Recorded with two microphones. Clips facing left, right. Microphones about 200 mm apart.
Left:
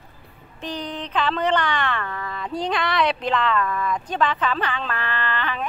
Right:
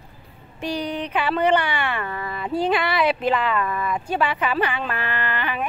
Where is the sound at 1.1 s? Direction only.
10° right (ahead or behind).